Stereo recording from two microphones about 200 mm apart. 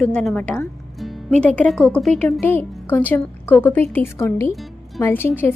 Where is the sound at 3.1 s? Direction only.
10° left (ahead or behind).